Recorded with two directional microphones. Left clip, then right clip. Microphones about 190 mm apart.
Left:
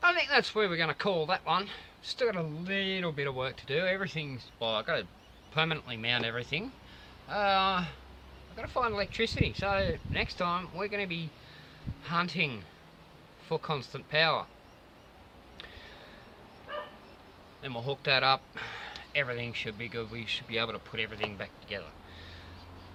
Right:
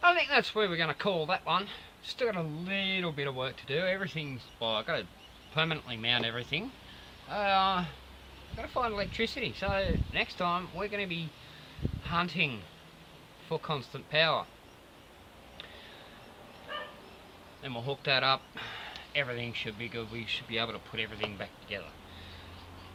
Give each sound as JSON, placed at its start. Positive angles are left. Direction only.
{"t": 0.0, "sound": "speech", "side_deg": 5}
{"t": 16.7, "sound": "dog", "side_deg": 30}
{"t": 17.6, "sound": "speech", "side_deg": 5}